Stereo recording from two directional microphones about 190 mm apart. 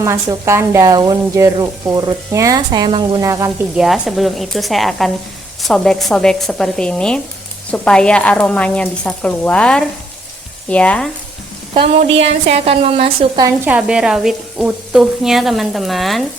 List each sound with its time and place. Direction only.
0.0 s speech: 15° right (ahead or behind)
3.8 s speech: centre (ahead or behind)
10.7 s frying: 5° left (ahead or behind)
11.7 s a woman's voice: 30° right (ahead or behind)
13.7 s speech: 5° right (ahead or behind)